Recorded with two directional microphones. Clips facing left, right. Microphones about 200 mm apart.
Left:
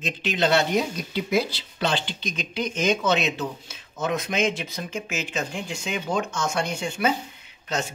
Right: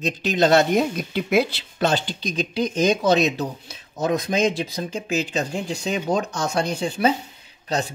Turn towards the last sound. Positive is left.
turn(degrees=-35)  # may be behind; listen again after turning